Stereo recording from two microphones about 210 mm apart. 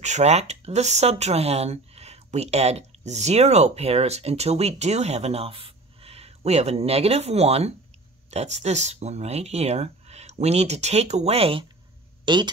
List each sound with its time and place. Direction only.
0.0 s speech: 35° right (ahead or behind)